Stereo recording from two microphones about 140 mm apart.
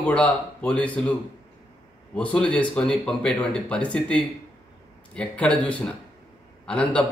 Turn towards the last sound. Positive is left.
turn(degrees=10)  # may be behind; listen again after turning